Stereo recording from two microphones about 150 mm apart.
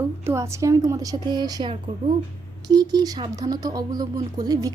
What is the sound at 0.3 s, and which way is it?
A woman's voice, 20° right (ahead or behind).